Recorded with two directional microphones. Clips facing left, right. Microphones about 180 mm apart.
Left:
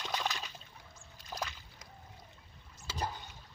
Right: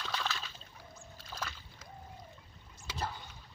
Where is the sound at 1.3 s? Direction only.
15° left (ahead or behind).